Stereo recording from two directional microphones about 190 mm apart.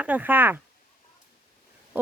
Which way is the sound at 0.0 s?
10° right (ahead or behind).